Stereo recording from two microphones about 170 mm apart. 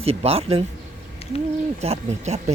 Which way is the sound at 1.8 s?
40° right (ahead or behind).